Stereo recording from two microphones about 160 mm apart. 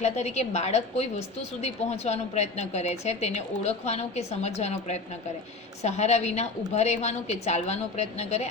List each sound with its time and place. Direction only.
0.0 s a woman's voice: 45° left (ahead or behind)